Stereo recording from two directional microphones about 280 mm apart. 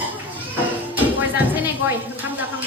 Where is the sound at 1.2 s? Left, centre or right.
Centre.